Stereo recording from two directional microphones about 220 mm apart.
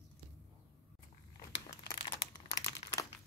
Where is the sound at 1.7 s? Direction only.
20° left (ahead or behind).